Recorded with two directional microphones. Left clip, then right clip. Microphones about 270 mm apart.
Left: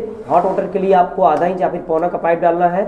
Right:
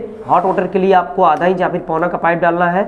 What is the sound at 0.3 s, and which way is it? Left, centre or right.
Speech, right.